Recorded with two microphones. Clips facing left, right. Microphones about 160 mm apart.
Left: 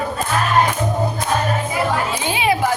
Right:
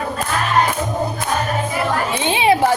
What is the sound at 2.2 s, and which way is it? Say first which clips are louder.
Speech: right 5 dB; 25° right (ahead or behind).